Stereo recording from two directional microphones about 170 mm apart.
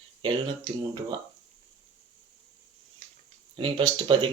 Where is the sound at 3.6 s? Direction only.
30° right (ahead or behind).